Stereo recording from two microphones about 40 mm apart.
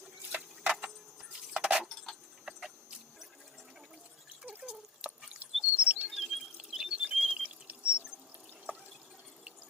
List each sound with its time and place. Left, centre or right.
0.3 s a sound: right
1.4 s keys jangling: centre
2.4 s tick-tock: centre
4.6 s drip: right
5.4 s bird: right
6.1 s water: centre
6.9 s water: right
7.2 s drip: centre
7.9 s water: right